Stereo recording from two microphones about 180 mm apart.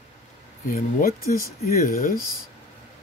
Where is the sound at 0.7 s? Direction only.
50° left (ahead or behind).